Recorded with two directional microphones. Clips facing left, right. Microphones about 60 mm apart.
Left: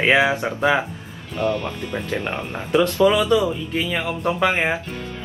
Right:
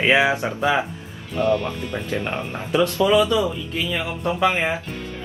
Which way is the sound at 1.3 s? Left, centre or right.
Centre.